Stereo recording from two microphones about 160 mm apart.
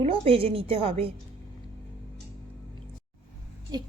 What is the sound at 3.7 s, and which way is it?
Speech, 25° right (ahead or behind).